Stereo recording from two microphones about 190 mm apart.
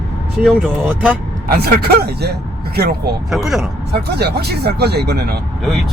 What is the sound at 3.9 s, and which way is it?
Speech, 60° right (ahead or behind).